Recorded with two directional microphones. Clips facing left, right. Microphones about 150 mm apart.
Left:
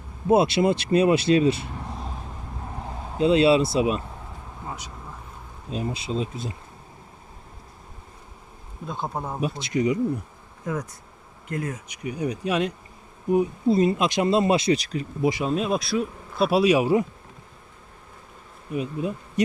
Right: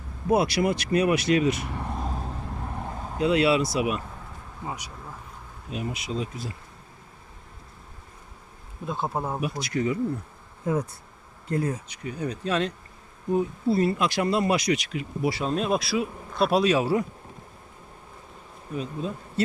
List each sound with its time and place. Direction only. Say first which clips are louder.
0.3 s speech: left 3 dB; 25° left (ahead or behind)
3.2 s speech: left 4 dB; 25° left (ahead or behind)
5.7 s speech: left 3 dB; 30° left (ahead or behind)
8.9 s speech: right 2 dB; 5° right (ahead or behind)
9.4 s speech: left 3 dB; 25° left (ahead or behind)
10.7 s speech: right 3 dB; 30° right (ahead or behind)
11.9 s speech: left 3 dB; 10° left (ahead or behind); by 15.0 s 35° left (ahead or behind)
15.2 s speech: left 4 dB; 15° left (ahead or behind)
15.4 s speech: left 1 dB; centre (ahead or behind); by 17.1 s 15° left (ahead or behind)
18.7 s speech: left 4 dB; 10° left (ahead or behind)